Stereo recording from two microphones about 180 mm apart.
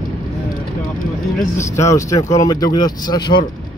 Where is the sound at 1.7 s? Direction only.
15° left (ahead or behind).